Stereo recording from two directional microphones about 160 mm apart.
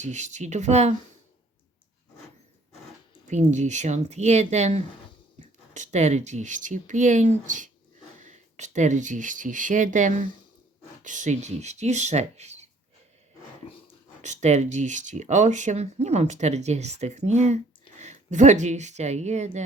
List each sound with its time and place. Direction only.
0.0 s speech: 45° right (ahead or behind)
3.2 s speech: 45° right (ahead or behind)
14.2 s speech: 45° right (ahead or behind)